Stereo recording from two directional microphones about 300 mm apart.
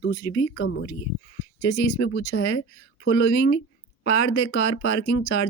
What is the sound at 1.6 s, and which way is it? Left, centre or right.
Speech, left.